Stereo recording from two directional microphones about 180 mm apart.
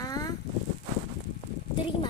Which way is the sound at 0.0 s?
20° left (ahead or behind).